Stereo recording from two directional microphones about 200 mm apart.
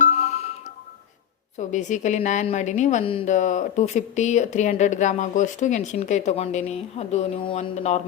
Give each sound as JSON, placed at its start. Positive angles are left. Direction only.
{"t": 0.0, "sound": "music", "side_deg": 35}
{"t": 1.5, "sound": "a woman's voice", "side_deg": 35}